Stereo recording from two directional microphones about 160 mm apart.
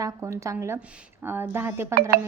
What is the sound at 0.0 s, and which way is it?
A woman's voice, 20° right (ahead or behind).